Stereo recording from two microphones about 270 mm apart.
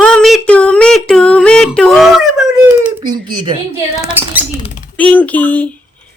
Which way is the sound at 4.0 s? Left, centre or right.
Centre.